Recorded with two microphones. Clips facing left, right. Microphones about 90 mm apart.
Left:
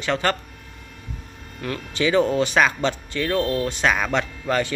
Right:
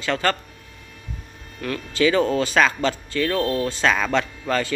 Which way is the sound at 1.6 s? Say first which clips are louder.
Right 3 dB; 25° left (ahead or behind).